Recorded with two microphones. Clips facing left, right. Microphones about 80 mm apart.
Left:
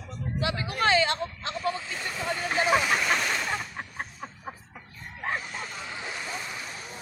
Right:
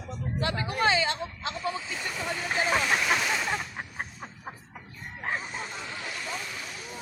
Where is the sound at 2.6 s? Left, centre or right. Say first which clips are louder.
Left 4 dB; centre.